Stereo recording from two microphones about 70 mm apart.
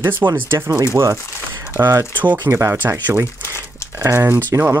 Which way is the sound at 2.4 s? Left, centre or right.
Right.